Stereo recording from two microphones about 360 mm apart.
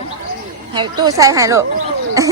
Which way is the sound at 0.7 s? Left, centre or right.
Centre.